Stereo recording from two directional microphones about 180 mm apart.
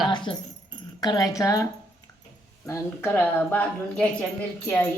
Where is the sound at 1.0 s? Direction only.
20° left (ahead or behind).